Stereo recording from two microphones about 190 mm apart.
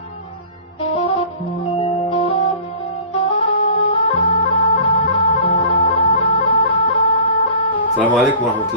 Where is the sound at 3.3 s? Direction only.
25° left (ahead or behind).